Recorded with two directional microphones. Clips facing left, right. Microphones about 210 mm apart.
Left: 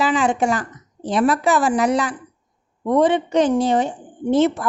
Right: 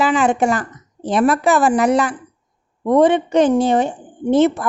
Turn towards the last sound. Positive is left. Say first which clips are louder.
# right 3 dB
turn(degrees=-55)  # may be behind; listen again after turning